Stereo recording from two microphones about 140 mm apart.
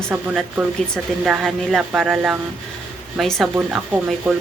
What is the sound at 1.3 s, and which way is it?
Speech, centre (ahead or behind).